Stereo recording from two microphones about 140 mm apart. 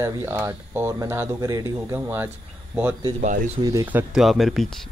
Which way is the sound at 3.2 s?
70° right (ahead or behind).